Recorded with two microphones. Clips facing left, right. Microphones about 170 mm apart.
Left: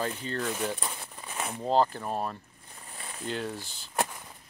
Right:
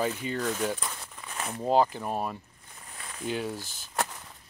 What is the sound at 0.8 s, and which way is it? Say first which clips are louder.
Crumpling: left 1 dB; 25° left (ahead or behind).